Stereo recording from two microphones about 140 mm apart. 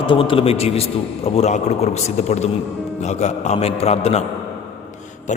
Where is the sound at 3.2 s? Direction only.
50° left (ahead or behind).